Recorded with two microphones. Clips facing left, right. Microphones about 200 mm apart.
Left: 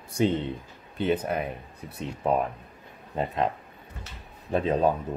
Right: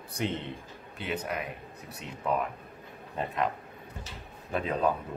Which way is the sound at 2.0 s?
35° left (ahead or behind).